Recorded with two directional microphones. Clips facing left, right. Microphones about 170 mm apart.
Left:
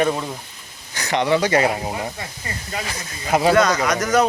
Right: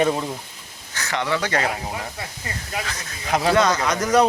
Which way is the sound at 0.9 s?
15° left (ahead or behind).